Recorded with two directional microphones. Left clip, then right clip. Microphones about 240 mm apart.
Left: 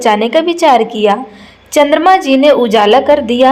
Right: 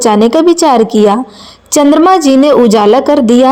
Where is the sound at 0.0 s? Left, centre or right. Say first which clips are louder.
Right 3 dB; right.